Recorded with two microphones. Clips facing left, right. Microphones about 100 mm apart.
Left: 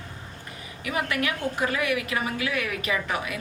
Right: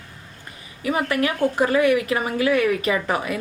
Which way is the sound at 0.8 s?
35° right (ahead or behind).